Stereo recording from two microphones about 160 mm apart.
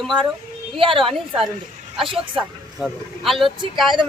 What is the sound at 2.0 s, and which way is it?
Speech, 35° right (ahead or behind).